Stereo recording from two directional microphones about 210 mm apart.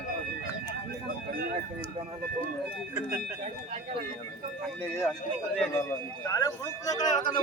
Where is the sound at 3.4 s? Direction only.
35° right (ahead or behind).